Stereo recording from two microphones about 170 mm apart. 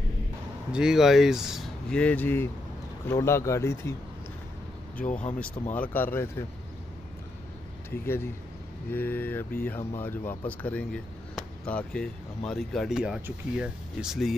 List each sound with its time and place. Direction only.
0.7 s speech: 5° right (ahead or behind); by 3.9 s 15° left (ahead or behind)
5.4 s speech: 10° left (ahead or behind)
8.0 s speech: 15° left (ahead or behind); by 14.3 s centre (ahead or behind)